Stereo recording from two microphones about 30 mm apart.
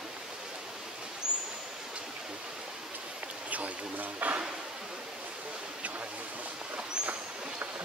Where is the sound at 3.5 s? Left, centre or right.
Right.